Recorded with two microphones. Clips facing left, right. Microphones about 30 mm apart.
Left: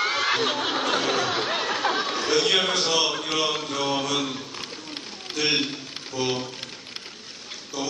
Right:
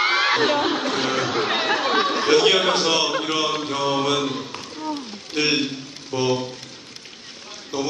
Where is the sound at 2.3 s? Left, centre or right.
Right.